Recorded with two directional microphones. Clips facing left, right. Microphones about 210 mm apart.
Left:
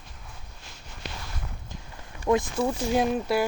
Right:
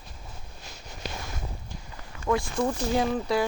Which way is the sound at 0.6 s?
40° right (ahead or behind).